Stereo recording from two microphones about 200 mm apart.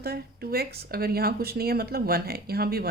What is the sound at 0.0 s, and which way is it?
Speech, 50° right (ahead or behind).